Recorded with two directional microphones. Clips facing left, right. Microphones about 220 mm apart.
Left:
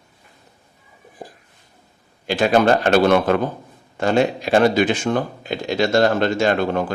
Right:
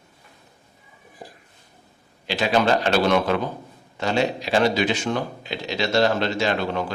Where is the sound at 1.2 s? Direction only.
50° left (ahead or behind).